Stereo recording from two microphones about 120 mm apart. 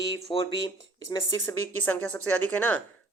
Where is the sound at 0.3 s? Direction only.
45° left (ahead or behind).